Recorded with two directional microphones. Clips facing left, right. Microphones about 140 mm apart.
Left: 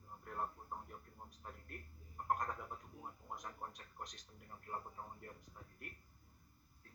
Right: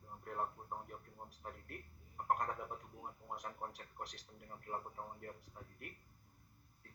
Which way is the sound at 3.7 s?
10° right (ahead or behind).